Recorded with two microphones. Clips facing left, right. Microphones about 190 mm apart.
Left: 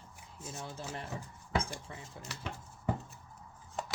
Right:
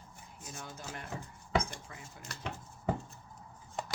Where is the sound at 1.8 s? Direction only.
30° left (ahead or behind).